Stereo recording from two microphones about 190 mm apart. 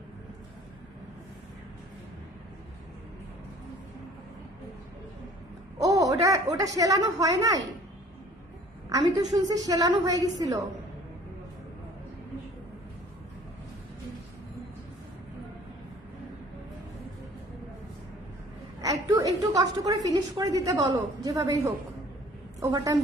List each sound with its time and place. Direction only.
5.8 s a woman's voice: 20° right (ahead or behind)
8.9 s a woman's voice: 20° right (ahead or behind)
18.8 s a sound: 20° right (ahead or behind)
20.8 s a woman's voice: 20° right (ahead or behind)